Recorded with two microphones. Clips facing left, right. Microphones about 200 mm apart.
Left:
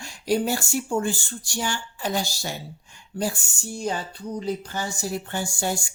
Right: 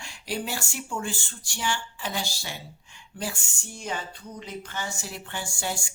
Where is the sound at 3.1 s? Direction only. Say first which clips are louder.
Left 7 dB; 40° left (ahead or behind).